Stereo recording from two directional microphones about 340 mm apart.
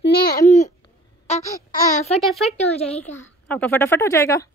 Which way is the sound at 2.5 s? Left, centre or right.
Centre.